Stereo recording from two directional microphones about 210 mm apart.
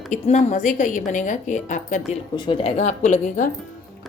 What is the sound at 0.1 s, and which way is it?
A woman's voice, 35° left (ahead or behind).